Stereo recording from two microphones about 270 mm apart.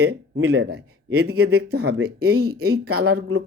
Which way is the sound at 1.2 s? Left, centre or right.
Right.